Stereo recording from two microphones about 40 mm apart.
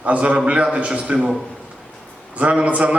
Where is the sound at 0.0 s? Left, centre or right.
Right.